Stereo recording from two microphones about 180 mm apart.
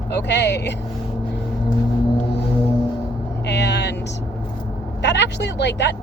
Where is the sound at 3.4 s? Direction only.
70° left (ahead or behind).